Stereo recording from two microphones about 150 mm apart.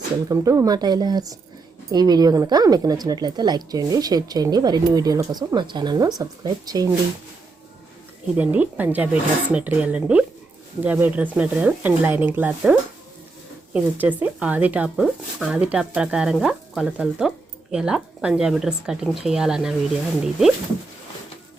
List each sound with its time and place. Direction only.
0.3 s speech: 20° right (ahead or behind)
8.4 s speech: 10° right (ahead or behind)
13.7 s speech: 10° right (ahead or behind)